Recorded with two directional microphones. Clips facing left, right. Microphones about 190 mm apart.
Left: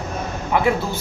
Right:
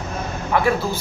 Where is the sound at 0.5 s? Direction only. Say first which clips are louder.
Even; 15° left (ahead or behind).